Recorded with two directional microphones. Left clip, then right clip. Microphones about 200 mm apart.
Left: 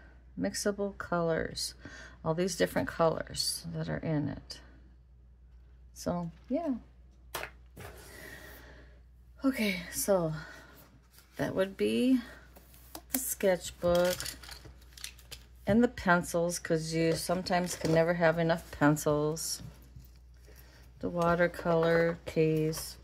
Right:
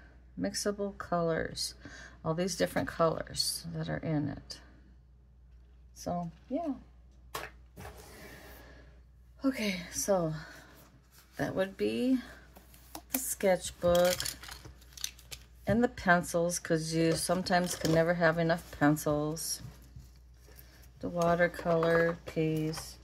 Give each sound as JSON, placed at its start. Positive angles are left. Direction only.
{"t": 0.4, "sound": "speech", "side_deg": 15}
{"t": 5.9, "sound": "speech", "side_deg": 30}
{"t": 9.4, "sound": "speech", "side_deg": 20}
{"t": 15.6, "sound": "speech", "side_deg": 15}
{"t": 21.0, "sound": "speech", "side_deg": 20}